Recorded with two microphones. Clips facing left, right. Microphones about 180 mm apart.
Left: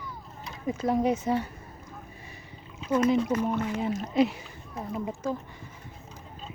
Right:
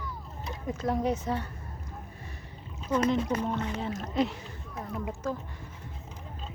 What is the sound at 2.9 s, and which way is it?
Speech, 10° left (ahead or behind).